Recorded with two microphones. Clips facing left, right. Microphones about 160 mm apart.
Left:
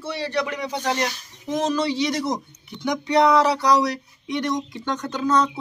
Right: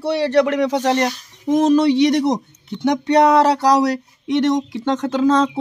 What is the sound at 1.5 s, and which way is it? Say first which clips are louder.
Speech: right 9 dB; 55° right (ahead or behind).